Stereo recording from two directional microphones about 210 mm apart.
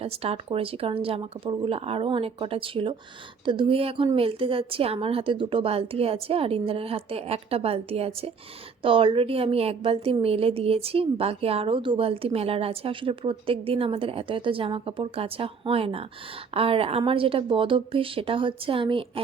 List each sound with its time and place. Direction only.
0.0 s a woman's voice: 30° right (ahead or behind)